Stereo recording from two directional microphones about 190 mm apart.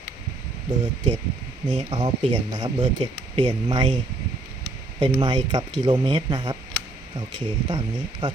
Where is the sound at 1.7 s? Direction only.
30° right (ahead or behind).